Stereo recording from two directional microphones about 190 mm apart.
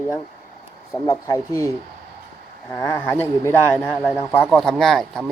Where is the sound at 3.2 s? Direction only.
10° left (ahead or behind).